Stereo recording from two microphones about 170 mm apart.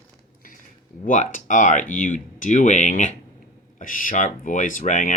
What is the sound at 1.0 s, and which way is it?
Speech, 50° left (ahead or behind).